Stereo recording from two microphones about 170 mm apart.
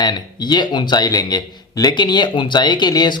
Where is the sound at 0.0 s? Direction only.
25° left (ahead or behind).